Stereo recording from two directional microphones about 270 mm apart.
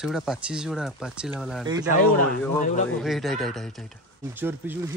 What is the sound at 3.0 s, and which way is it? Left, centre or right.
Speech, centre.